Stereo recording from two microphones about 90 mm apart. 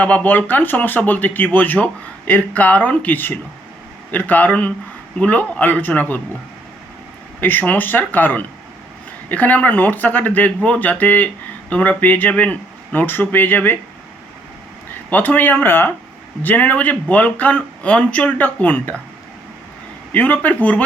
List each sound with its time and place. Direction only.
0.0 s speech: 15° left (ahead or behind)
7.4 s speech: 20° left (ahead or behind)
15.1 s speech: 20° left (ahead or behind)
20.1 s speech: 20° left (ahead or behind)